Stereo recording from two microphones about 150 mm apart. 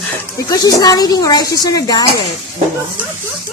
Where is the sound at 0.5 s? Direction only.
25° left (ahead or behind).